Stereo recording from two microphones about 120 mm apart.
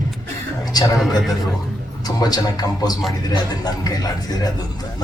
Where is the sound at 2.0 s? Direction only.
35° left (ahead or behind).